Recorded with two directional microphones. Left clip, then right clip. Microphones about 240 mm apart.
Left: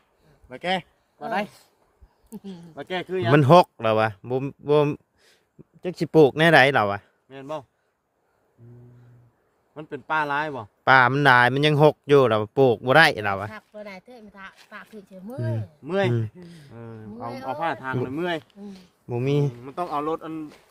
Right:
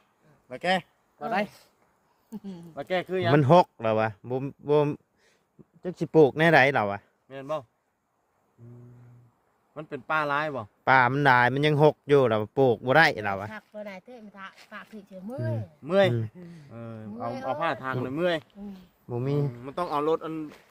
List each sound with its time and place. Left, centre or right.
0.4 s speech: centre
1.5 s speech: centre
2.7 s speech: right
3.3 s speech: left
7.3 s speech: right
9.7 s speech: centre
10.8 s speech: centre
15.8 s speech: right
16.4 s speech: left
16.6 s speech: right
19.0 s speech: left
19.6 s speech: right